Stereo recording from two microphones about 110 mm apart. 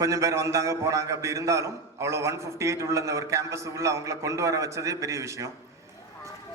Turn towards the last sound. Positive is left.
turn(degrees=-25)  # may be behind; listen again after turning